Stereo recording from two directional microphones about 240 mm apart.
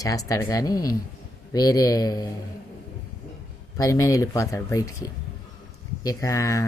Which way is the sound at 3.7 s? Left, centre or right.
Centre.